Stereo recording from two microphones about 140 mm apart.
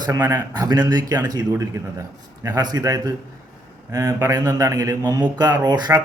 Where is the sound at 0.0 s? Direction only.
20° right (ahead or behind).